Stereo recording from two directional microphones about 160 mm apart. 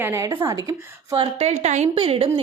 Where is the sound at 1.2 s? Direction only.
45° right (ahead or behind).